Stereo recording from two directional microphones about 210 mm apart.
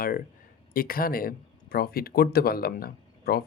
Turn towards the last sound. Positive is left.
turn(degrees=45)  # may be behind; listen again after turning